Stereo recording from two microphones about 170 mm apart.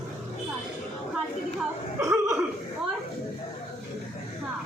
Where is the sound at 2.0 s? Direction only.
20° right (ahead or behind).